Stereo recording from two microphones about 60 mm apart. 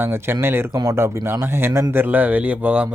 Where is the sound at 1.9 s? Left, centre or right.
Right.